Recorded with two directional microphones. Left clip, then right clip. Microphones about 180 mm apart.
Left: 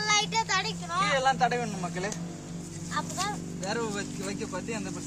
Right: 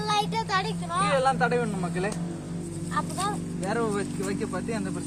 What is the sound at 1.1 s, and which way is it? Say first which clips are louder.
Speech: right 2 dB; 25° left (ahead or behind).